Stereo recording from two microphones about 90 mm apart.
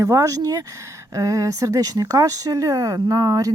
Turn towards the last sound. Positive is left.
turn(degrees=-40)  # may be behind; listen again after turning